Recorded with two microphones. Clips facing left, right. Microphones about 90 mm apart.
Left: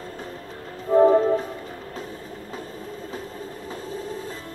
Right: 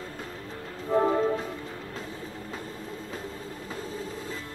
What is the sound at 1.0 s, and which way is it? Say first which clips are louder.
Music: left 10 dB; 40° left (ahead or behind).